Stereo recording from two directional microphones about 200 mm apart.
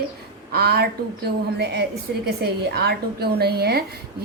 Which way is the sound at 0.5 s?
55° right (ahead or behind).